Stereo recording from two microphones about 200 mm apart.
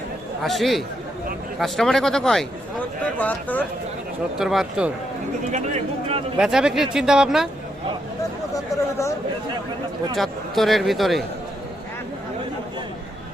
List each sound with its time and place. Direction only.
0.4 s a man's voice: centre (ahead or behind)
5.5 s speech: 35° right (ahead or behind)
6.3 s a man's voice: 5° right (ahead or behind)
8.7 s speech: 15° left (ahead or behind)
10.2 s a man's voice: centre (ahead or behind)